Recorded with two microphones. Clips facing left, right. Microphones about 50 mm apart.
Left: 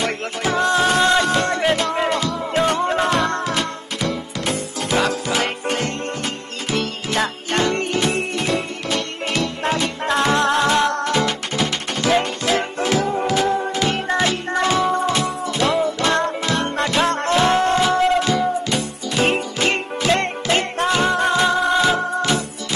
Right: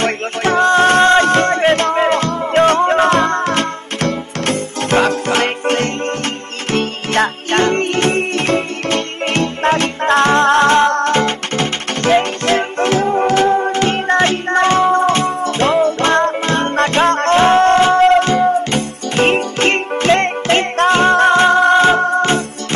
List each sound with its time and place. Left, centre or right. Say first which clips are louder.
0.0 s music: right 6 dB; right
22.2 s music: right 5 dB; right